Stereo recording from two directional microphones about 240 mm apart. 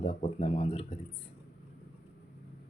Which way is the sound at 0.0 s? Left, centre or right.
Left.